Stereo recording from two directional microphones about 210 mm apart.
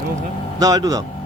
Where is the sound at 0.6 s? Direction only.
20° right (ahead or behind).